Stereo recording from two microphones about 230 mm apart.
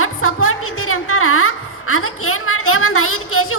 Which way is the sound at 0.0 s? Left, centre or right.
Left.